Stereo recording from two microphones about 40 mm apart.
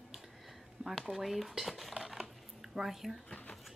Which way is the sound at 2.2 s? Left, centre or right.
Centre.